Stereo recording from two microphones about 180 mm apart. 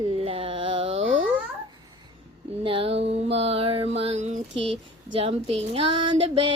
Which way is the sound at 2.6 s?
30° right (ahead or behind).